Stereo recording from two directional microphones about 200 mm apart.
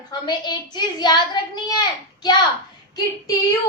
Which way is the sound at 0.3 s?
20° left (ahead or behind).